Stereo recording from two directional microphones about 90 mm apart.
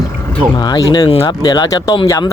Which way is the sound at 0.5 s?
50° left (ahead or behind).